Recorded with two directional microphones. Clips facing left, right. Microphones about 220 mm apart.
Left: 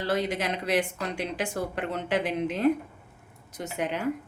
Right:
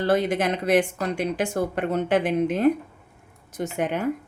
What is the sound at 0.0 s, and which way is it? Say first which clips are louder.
Speech: right 6 dB; 50° right (ahead or behind).